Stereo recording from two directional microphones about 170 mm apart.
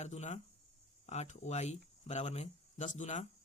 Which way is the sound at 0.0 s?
40° left (ahead or behind).